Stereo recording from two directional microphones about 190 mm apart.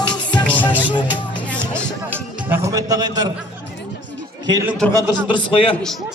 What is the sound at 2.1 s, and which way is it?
Music, 15° right (ahead or behind).